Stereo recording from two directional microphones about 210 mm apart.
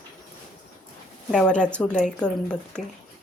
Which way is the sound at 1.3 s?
5° left (ahead or behind).